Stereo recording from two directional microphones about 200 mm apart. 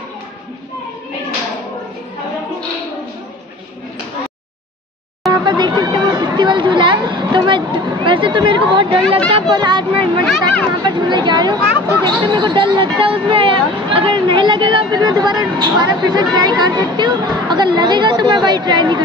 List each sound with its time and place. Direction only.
5.3 s chatter: 20° right (ahead or behind)
9.3 s speech: 20° right (ahead or behind)